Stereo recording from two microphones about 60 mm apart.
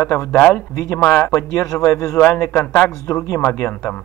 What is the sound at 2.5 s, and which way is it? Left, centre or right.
Speech, left.